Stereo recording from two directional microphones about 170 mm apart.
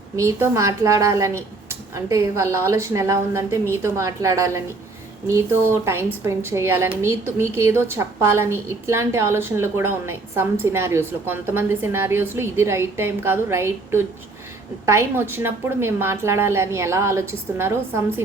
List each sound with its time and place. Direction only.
0.2 s a woman's voice: 20° right (ahead or behind)
5.6 s a woman's voice: 15° right (ahead or behind)